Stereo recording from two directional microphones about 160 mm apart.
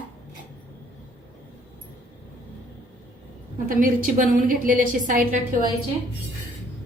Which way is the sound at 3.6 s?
55° right (ahead or behind).